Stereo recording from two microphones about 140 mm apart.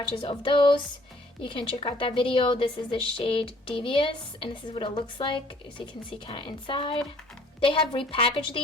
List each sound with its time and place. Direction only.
0.1 s a woman's voice: 40° left (ahead or behind)